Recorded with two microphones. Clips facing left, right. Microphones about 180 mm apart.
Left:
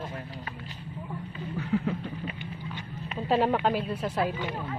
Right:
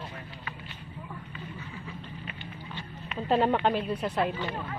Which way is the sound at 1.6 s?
70° left (ahead or behind).